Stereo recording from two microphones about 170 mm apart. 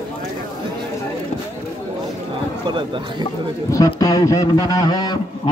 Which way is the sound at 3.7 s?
20° left (ahead or behind).